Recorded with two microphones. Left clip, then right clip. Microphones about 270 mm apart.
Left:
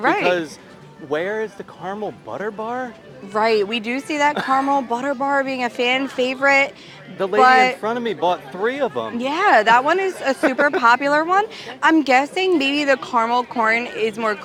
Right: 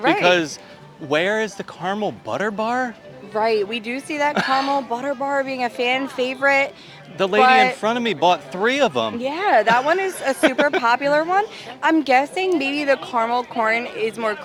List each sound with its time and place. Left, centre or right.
0.0 s a woman's voice: centre
0.3 s speech: right
3.3 s speech: centre
4.4 s speech: right
4.7 s a woman's voice: centre
7.2 s speech: right
7.4 s a woman's voice: centre
7.8 s speech: right
9.2 s a woman's voice: left